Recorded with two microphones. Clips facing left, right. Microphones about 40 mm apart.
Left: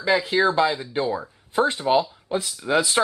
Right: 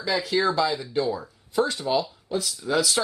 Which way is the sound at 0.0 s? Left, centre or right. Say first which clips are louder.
Left 4 dB; left.